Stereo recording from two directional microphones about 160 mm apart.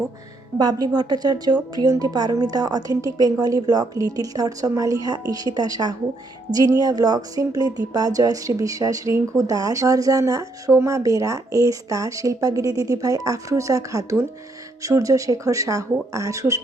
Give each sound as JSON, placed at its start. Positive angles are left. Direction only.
{"t": 0.6, "sound": "speech", "side_deg": -25}